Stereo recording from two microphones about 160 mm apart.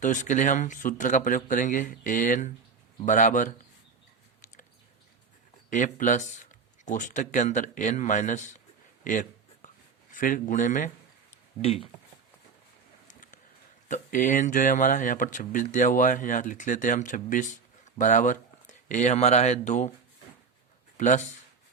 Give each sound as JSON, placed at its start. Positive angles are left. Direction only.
{"t": 0.0, "sound": "speech", "side_deg": 50}
{"t": 5.7, "sound": "speech", "side_deg": 50}
{"t": 9.0, "sound": "a sound", "side_deg": 55}
{"t": 10.1, "sound": "speech", "side_deg": 55}
{"t": 11.6, "sound": "speech", "side_deg": 35}
{"t": 13.1, "sound": "a sound", "side_deg": 55}
{"t": 13.8, "sound": "speech", "side_deg": 55}
{"t": 21.0, "sound": "speech", "side_deg": 50}